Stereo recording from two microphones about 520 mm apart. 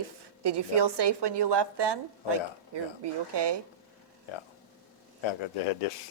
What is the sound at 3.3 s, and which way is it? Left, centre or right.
Speech, right.